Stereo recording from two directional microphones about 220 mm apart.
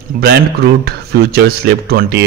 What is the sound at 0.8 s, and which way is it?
Speech, 45° right (ahead or behind).